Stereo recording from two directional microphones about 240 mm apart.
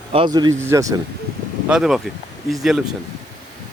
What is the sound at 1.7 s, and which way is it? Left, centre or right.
Speech, centre.